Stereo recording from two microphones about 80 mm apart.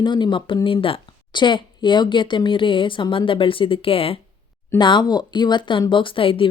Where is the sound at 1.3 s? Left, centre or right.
Left.